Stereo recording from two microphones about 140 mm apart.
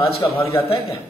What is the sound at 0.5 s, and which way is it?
Speech, 40° left (ahead or behind).